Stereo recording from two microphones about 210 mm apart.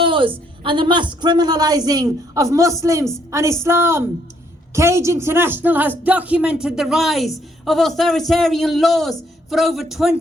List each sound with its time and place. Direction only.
0.0 s a woman's voice: 25° right (ahead or behind); by 10.2 s centre (ahead or behind)